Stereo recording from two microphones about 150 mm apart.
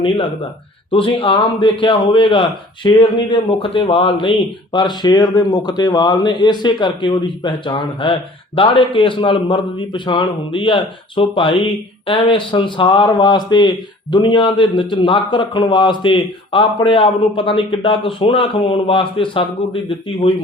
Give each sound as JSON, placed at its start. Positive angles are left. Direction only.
{"t": 0.9, "sound": "speech", "side_deg": 35}